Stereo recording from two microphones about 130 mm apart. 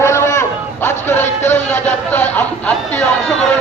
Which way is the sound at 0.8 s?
15° left (ahead or behind).